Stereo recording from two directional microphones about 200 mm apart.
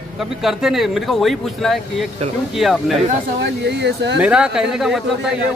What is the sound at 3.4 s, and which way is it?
Speech, 60° right (ahead or behind).